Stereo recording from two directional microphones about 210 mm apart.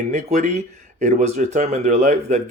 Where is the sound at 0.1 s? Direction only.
35° right (ahead or behind).